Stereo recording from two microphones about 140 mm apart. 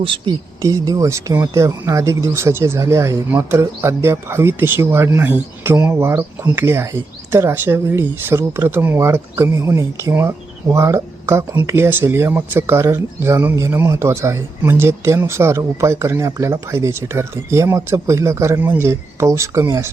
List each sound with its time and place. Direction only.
0.0 s speech: 40° right (ahead or behind)
0.6 s speech: 20° right (ahead or behind)